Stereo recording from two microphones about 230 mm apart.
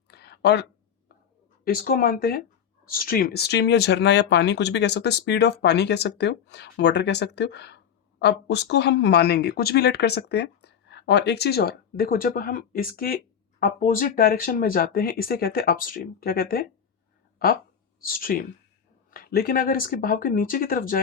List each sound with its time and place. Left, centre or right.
0.1 s a sound: left
1.6 s speech: left
18.0 s speech: left